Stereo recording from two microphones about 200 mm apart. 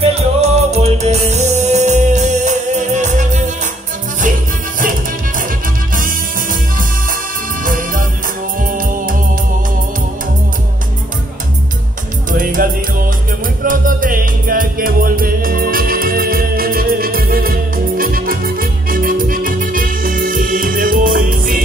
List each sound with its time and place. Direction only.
0.0 s music: 30° right (ahead or behind)
5.9 s music: 45° right (ahead or behind)
12.3 s music: 45° right (ahead or behind)